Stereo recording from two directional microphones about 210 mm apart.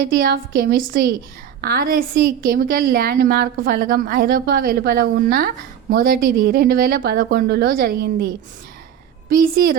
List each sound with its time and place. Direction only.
0.0 s a woman's voice: 45° right (ahead or behind)
9.3 s a woman's voice: 45° right (ahead or behind)